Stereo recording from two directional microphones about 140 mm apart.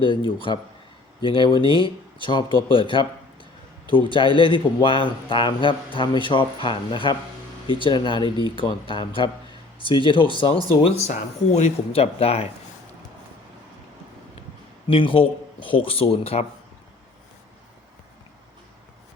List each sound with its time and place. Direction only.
0.3 s speech: 35° left (ahead or behind)
14.8 s speech: 40° left (ahead or behind)